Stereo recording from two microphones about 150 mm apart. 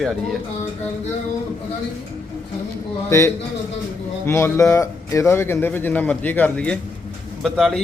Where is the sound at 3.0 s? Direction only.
20° left (ahead or behind); by 7.8 s centre (ahead or behind).